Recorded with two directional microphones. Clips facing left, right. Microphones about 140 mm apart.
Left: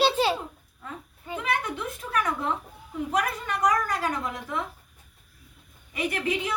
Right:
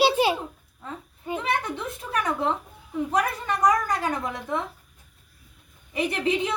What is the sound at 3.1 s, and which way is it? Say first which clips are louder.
A woman's voice: right 2 dB; 35° right (ahead or behind).